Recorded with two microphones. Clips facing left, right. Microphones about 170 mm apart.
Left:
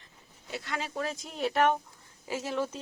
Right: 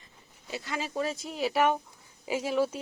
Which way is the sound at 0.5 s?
Centre (ahead or behind).